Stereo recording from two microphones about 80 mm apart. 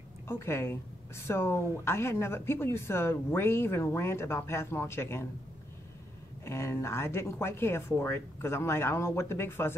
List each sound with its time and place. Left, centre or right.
0.3 s a woman's voice: left
6.4 s a woman's voice: left